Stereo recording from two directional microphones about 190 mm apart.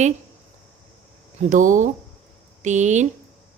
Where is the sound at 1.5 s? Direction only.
40° right (ahead or behind).